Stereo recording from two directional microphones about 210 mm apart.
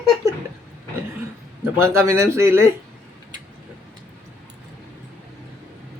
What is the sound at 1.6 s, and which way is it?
Speech, 10° right (ahead or behind).